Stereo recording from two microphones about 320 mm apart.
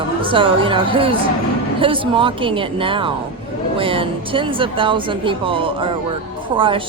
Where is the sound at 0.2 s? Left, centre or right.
Centre.